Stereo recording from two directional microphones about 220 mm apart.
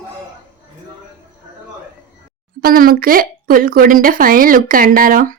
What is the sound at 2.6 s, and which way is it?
Speech, 40° right (ahead or behind).